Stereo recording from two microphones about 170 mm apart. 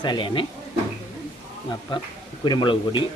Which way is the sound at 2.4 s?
25° left (ahead or behind).